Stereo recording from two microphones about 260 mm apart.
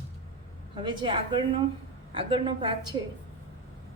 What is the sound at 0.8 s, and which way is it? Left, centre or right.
Speech, centre.